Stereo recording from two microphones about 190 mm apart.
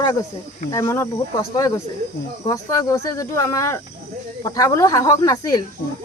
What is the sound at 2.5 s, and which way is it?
Speech, 15° left (ahead or behind).